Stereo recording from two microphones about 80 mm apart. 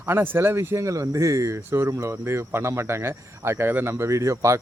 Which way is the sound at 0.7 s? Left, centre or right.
Right.